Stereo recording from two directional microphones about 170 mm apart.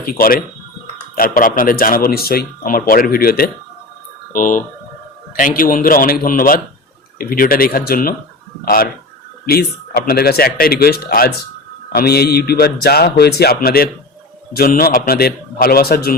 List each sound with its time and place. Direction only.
0.0 s speech: 60° left (ahead or behind)
4.3 s speech: 50° left (ahead or behind)